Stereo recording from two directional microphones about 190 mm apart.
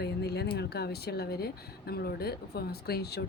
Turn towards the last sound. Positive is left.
turn(degrees=55)  # may be behind; listen again after turning